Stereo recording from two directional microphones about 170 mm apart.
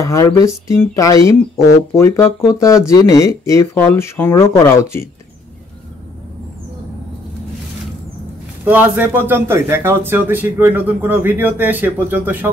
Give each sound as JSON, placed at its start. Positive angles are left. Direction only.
{"t": 0.0, "sound": "speech", "side_deg": 20}
{"t": 8.6, "sound": "a man's voice", "side_deg": -10}